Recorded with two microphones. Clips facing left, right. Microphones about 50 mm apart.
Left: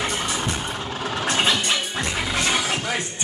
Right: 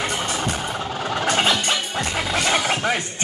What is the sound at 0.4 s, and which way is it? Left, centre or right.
Vehicle, centre.